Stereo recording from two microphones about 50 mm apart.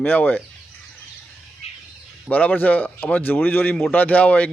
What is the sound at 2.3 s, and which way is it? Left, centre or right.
Speech, left.